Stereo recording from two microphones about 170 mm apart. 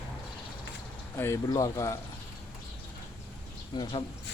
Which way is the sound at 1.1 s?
15° left (ahead or behind).